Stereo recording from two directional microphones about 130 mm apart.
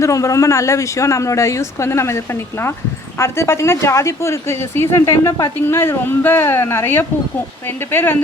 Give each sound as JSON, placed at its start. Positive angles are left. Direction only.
{"t": 0.0, "sound": "speech", "side_deg": 25}